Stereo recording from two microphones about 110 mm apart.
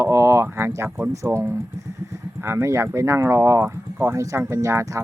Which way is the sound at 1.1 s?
30° right (ahead or behind).